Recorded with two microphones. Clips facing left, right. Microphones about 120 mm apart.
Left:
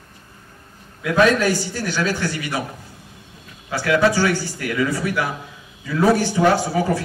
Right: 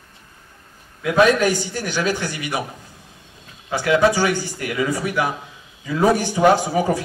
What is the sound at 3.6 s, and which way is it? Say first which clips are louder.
A man's voice: right 1 dB; 15° right (ahead or behind).